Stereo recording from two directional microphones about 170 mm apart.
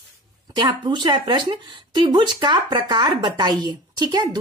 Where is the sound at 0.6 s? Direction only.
25° right (ahead or behind).